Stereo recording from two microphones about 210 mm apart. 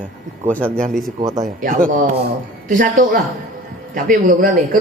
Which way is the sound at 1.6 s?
40° right (ahead or behind).